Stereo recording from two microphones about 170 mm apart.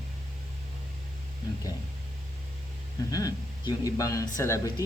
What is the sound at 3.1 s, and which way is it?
Speech, 20° left (ahead or behind).